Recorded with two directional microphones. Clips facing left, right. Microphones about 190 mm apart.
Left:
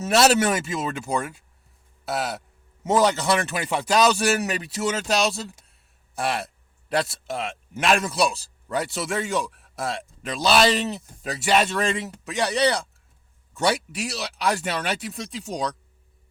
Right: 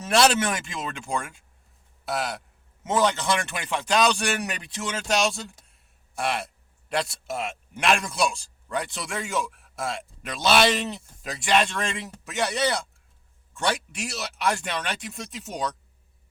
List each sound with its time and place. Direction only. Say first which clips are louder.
0.1 s a man's voice: left 3 dB; 5° left (ahead or behind)